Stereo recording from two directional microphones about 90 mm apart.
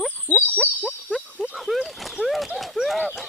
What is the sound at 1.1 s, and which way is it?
Speech, 5° right (ahead or behind).